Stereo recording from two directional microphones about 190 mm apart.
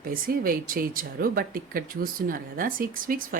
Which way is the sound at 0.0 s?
50° right (ahead or behind).